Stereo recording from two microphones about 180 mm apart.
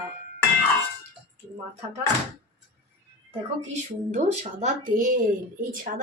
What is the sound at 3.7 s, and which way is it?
A woman's voice, 40° right (ahead or behind).